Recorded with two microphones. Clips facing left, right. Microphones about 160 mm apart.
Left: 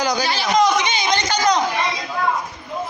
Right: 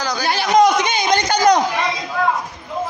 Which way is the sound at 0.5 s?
55° right (ahead or behind).